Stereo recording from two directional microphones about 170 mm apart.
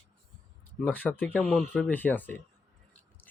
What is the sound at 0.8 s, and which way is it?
Speech, 10° left (ahead or behind).